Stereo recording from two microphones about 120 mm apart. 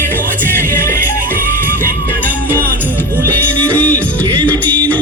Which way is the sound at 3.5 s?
10° left (ahead or behind).